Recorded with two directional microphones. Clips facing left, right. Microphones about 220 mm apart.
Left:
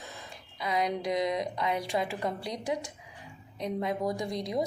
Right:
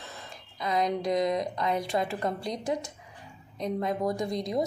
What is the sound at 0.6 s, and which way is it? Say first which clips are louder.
A woman's voice: right 2 dB; 10° left (ahead or behind).